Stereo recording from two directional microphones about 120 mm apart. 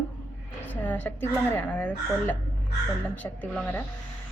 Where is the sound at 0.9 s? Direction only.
15° left (ahead or behind).